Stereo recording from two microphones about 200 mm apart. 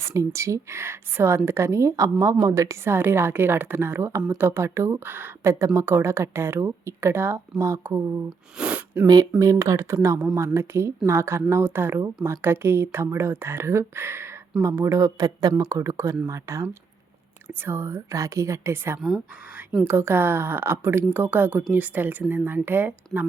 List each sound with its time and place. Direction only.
0.0 s speech: 15° right (ahead or behind)
9.4 s speech: 15° right (ahead or behind)
18.9 s speech: centre (ahead or behind)
19.8 s speech: 10° right (ahead or behind)